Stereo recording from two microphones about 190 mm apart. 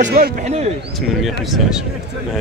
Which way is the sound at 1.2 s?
Centre (ahead or behind).